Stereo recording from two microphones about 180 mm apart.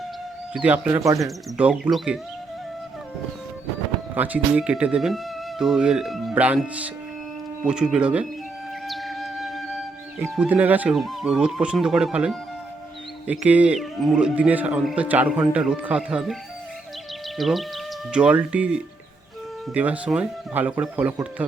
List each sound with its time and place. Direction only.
0.5 s speech: 5° right (ahead or behind)
4.1 s speech: 10° right (ahead or behind)
8.9 s music: centre (ahead or behind)
10.2 s speech: 10° right (ahead or behind)